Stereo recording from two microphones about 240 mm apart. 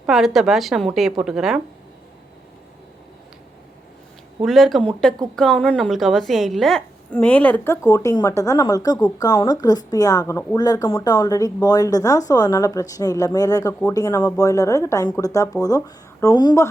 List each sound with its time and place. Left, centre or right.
0.0 s a woman's voice: centre
4.4 s a woman's voice: centre